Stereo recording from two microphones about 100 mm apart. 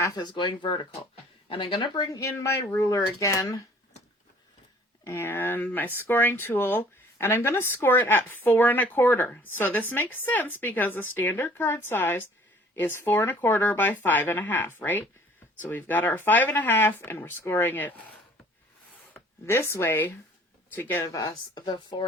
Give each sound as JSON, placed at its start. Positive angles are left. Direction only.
{"t": 0.0, "sound": "speech", "side_deg": 45}
{"t": 2.1, "sound": "speech", "side_deg": 30}
{"t": 5.0, "sound": "speech", "side_deg": 25}
{"t": 19.1, "sound": "speech", "side_deg": 25}
{"t": 21.1, "sound": "speech", "side_deg": 40}